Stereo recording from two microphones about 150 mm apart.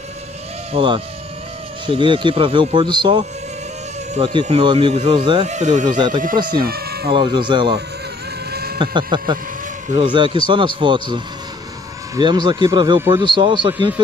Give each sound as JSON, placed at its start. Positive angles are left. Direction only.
{"t": 0.7, "sound": "speech", "side_deg": -35}
{"t": 5.4, "sound": "speech", "side_deg": -50}
{"t": 6.6, "sound": "speech", "side_deg": -90}
{"t": 7.1, "sound": "speech", "side_deg": -35}
{"t": 8.5, "sound": "bleat", "side_deg": -90}
{"t": 8.7, "sound": "speech", "side_deg": -30}